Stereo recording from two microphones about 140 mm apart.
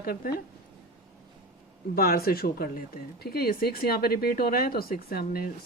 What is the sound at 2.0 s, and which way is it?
Speech, 90° left.